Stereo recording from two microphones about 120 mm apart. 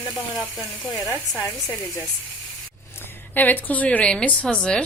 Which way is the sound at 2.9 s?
15° left (ahead or behind).